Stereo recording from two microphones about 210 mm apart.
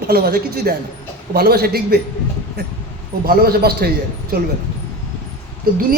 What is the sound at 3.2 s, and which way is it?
Speech, 45° right (ahead or behind).